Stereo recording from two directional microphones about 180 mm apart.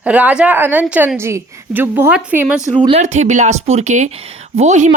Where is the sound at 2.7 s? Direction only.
25° right (ahead or behind).